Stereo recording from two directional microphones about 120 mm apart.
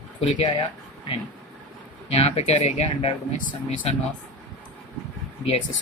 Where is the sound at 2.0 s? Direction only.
60° left (ahead or behind).